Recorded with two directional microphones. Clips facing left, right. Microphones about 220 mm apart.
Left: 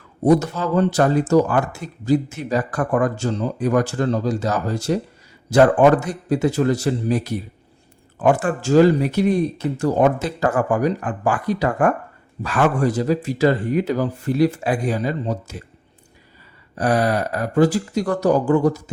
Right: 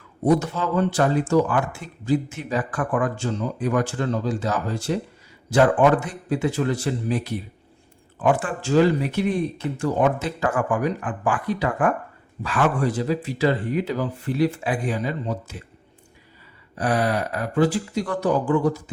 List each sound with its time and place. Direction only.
0.3 s speech: 40° left (ahead or behind)
16.7 s speech: 40° left (ahead or behind)